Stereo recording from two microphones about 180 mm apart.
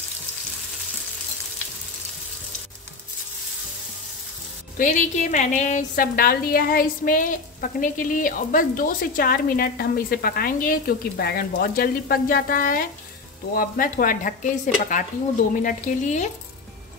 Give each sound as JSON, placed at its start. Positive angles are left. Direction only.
{"t": 4.7, "sound": "a woman's voice", "side_deg": 45}